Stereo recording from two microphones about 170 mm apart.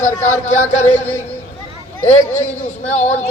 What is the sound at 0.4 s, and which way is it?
Speech, 45° left (ahead or behind).